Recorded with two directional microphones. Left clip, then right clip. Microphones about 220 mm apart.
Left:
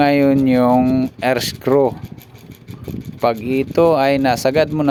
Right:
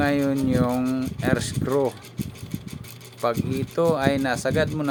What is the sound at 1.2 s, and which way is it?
Speech, 35° left (ahead or behind).